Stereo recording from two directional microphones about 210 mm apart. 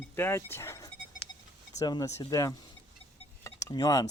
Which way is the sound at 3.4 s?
15° left (ahead or behind).